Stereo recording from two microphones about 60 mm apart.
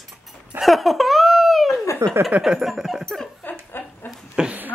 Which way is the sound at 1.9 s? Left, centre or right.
Left.